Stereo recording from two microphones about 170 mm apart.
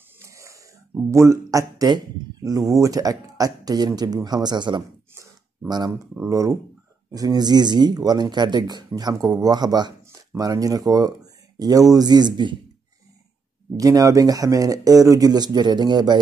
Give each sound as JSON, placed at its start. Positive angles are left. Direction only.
{"t": 0.2, "sound": "wheeze", "side_deg": -20}
{"t": 1.1, "sound": "speech", "side_deg": -20}
{"t": 5.1, "sound": "a sound", "side_deg": -15}
{"t": 6.1, "sound": "speech", "side_deg": -20}
{"t": 13.7, "sound": "speech", "side_deg": -20}